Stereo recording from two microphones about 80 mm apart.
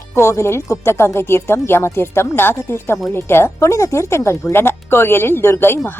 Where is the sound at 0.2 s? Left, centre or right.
Left.